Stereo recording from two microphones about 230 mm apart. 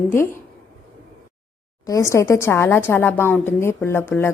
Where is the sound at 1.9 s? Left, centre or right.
Centre.